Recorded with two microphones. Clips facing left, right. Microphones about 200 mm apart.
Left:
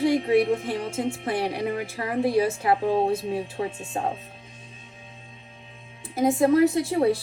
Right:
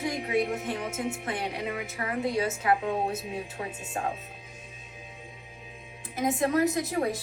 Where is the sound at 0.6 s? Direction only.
30° left (ahead or behind).